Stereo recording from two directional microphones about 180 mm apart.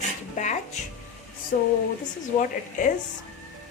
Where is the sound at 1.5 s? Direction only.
50° left (ahead or behind).